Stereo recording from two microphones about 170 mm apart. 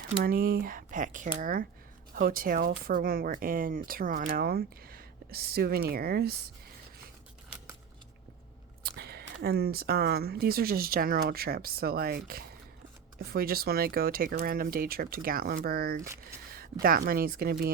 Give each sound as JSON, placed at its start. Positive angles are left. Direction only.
{"t": 0.2, "sound": "speech", "side_deg": -60}
{"t": 8.8, "sound": "speech", "side_deg": -70}
{"t": 16.0, "sound": "speech", "side_deg": -15}
{"t": 16.8, "sound": "speech", "side_deg": -60}